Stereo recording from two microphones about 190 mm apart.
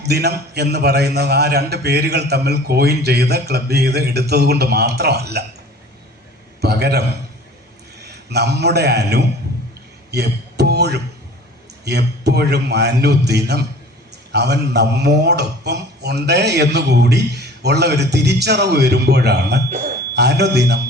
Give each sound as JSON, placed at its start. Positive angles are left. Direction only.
{"t": 0.0, "sound": "a man's voice", "side_deg": -60}
{"t": 6.6, "sound": "a man's voice", "side_deg": -60}
{"t": 8.0, "sound": "a man's voice", "side_deg": -60}